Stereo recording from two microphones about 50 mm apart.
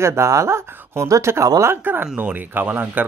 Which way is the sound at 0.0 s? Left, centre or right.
Right.